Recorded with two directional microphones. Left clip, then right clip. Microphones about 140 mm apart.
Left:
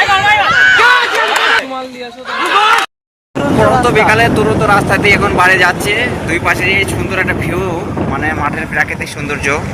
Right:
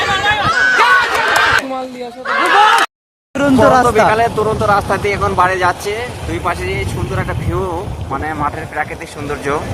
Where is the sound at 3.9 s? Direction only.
10° right (ahead or behind).